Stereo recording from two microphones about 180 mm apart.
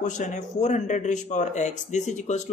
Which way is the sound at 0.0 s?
40° left (ahead or behind).